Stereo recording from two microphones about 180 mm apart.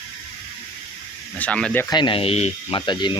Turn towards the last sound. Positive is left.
turn(degrees=25)  # may be behind; listen again after turning